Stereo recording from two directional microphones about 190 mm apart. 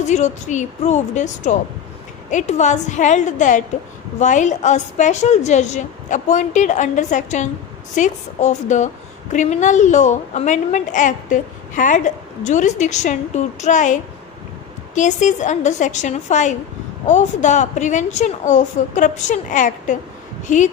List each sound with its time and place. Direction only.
0.0 s a woman's voice: 40° left (ahead or behind)